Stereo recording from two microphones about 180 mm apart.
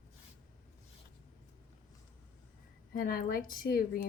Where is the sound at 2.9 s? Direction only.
50° left (ahead or behind).